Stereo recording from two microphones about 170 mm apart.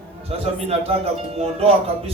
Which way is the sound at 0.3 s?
35° right (ahead or behind).